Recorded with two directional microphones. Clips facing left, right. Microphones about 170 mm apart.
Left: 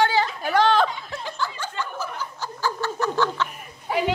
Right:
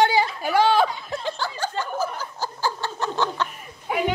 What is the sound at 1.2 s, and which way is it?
Chuckle, 35° right (ahead or behind).